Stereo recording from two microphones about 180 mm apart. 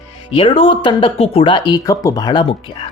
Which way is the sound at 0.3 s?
30° left (ahead or behind).